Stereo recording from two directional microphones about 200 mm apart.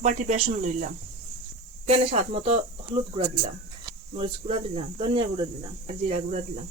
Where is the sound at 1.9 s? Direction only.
30° right (ahead or behind).